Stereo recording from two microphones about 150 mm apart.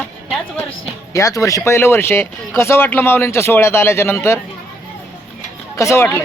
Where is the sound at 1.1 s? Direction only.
20° left (ahead or behind).